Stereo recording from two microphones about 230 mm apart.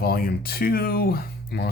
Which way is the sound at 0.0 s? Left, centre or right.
Left.